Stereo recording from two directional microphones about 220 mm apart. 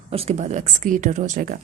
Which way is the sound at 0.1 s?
25° right (ahead or behind).